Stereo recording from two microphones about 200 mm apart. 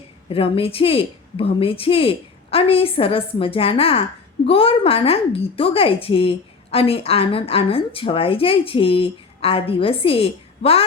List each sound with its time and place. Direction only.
0.3 s a woman's voice: 30° left (ahead or behind)